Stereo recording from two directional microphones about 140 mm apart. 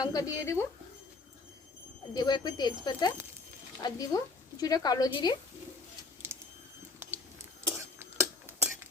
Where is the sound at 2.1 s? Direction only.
30° left (ahead or behind).